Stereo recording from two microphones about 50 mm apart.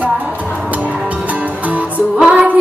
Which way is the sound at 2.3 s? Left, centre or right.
Right.